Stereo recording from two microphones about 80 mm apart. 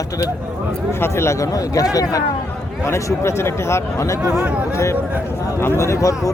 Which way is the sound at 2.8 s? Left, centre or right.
Left.